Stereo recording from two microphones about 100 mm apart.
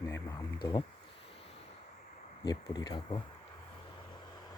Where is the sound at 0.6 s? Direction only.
45° left (ahead or behind).